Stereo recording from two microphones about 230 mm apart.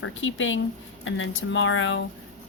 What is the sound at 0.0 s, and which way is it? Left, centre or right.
Speech, left.